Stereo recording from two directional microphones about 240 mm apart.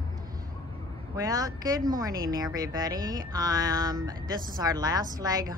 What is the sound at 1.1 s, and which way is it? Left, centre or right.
Speech, centre.